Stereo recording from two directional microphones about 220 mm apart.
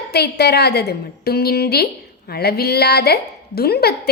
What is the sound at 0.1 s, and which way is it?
A woman's voice, 50° left (ahead or behind).